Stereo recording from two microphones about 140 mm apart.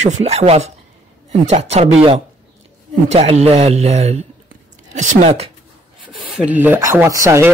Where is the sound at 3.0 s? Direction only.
50° right (ahead or behind).